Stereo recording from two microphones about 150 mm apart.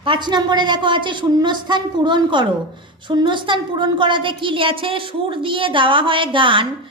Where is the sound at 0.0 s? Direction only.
30° right (ahead or behind).